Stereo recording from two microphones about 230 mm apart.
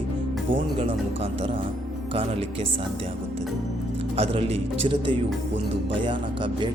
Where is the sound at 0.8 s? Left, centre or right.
Right.